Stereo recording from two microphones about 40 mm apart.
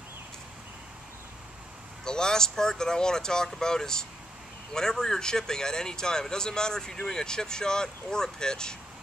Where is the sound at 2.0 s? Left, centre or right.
Centre.